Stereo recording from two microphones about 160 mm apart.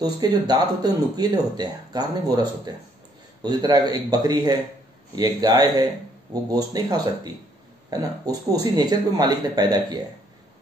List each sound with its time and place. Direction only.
0.0 s speech: 25° right (ahead or behind)